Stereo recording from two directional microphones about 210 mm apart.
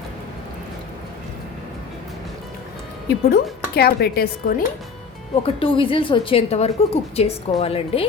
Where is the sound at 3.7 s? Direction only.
50° left (ahead or behind).